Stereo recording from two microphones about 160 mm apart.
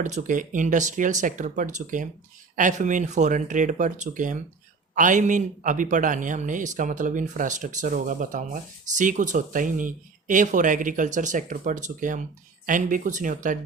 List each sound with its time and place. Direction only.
0.0 s a man's voice: 50° right (ahead or behind)